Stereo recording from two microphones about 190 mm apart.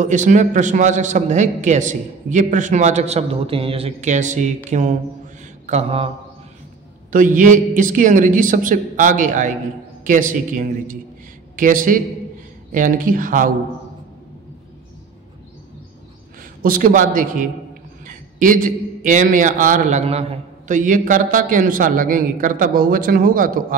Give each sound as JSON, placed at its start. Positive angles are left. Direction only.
{"t": 0.0, "sound": "a man's voice", "side_deg": -40}
{"t": 7.1, "sound": "a man's voice", "side_deg": -45}
{"t": 16.6, "sound": "a man's voice", "side_deg": -45}